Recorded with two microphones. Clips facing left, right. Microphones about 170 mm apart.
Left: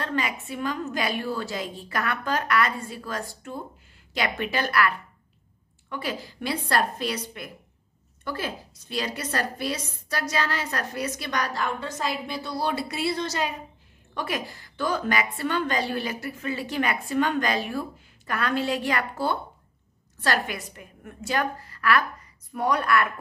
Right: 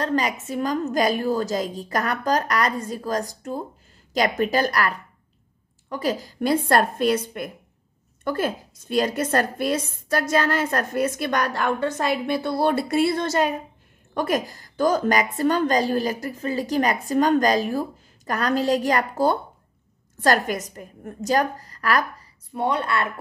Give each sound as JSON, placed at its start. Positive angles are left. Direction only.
{"t": 0.0, "sound": "a woman's voice", "side_deg": -40}
{"t": 22.5, "sound": "a woman's voice", "side_deg": -25}